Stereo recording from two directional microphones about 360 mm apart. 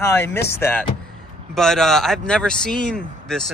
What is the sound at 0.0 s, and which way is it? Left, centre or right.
A man's voice, centre.